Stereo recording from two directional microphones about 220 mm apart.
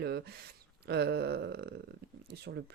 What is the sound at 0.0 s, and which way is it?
Speech, 45° right (ahead or behind).